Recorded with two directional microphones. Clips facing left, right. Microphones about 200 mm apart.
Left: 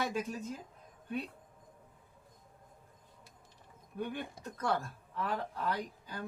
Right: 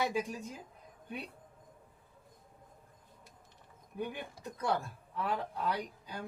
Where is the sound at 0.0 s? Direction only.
10° right (ahead or behind).